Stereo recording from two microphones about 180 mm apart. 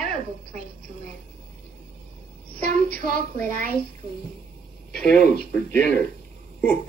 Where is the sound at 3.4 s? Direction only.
50° right (ahead or behind).